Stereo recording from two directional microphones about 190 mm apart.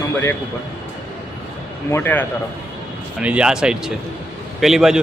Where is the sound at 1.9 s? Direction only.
10° left (ahead or behind).